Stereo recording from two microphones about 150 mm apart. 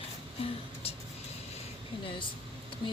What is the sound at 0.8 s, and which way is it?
Vehicle, 40° left (ahead or behind).